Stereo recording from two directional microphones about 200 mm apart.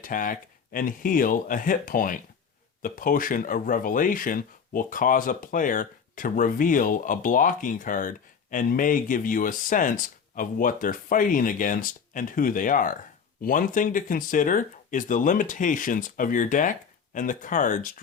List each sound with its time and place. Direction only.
0.0 s speech: 40° left (ahead or behind)